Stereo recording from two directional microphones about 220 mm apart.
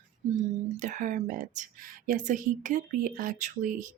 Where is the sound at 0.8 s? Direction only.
35° right (ahead or behind).